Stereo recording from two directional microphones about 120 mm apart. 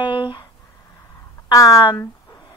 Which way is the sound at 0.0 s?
40° left (ahead or behind).